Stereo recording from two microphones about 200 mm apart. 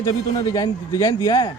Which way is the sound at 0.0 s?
20° left (ahead or behind).